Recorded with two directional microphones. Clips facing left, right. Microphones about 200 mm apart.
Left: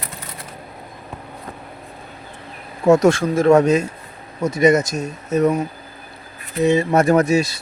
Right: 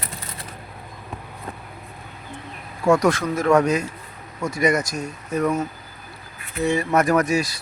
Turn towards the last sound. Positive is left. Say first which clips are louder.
# left 4 dB
turn(degrees=25)  # may be behind; listen again after turning